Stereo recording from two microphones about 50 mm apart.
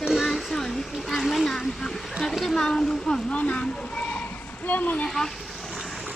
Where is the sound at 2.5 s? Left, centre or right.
Centre.